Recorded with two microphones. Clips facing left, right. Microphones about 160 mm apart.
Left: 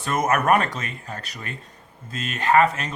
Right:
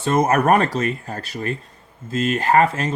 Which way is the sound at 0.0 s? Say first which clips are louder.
Right 5 dB; 30° right (ahead or behind).